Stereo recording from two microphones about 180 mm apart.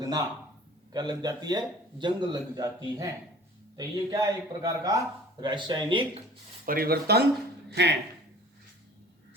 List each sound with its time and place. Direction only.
0.9 s speech: 20° right (ahead or behind)
6.7 s speech: 55° right (ahead or behind)